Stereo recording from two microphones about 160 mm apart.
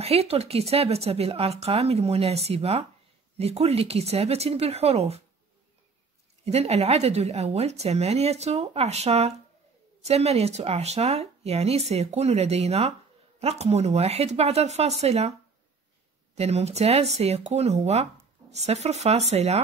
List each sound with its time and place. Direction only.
0.0 s speech: 40° right (ahead or behind)
6.4 s speech: 40° right (ahead or behind)
16.3 s speech: 40° right (ahead or behind)